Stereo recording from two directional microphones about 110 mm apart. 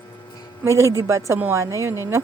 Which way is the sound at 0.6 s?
25° right (ahead or behind).